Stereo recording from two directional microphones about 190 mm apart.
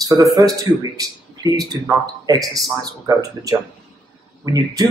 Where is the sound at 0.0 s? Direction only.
20° right (ahead or behind).